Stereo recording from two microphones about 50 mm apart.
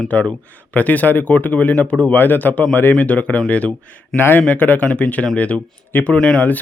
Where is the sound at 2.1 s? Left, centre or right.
Left.